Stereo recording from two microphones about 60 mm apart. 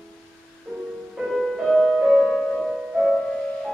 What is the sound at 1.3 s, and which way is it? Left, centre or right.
Music, centre.